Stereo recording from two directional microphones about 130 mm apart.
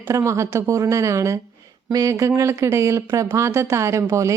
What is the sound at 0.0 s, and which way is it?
Speech, 20° right (ahead or behind).